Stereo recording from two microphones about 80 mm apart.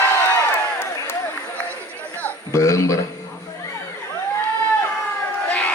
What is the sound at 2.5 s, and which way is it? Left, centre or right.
Speech, left.